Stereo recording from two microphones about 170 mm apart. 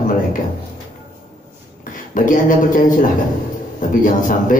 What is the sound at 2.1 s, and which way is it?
A man's voice, 50° left (ahead or behind).